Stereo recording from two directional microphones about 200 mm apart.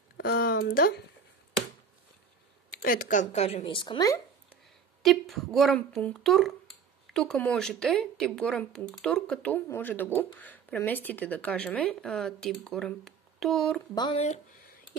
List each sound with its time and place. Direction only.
0.2 s a sound: 55° left (ahead or behind)
2.7 s speech: 45° left (ahead or behind); by 4.2 s 20° left (ahead or behind)
5.0 s speech: centre (ahead or behind)
13.9 s speech: 20° left (ahead or behind)